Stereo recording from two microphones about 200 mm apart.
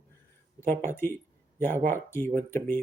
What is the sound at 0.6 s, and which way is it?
Speech, 10° left (ahead or behind).